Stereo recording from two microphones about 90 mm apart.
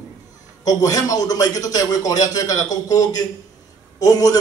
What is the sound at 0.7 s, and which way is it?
A man's voice, 40° left (ahead or behind).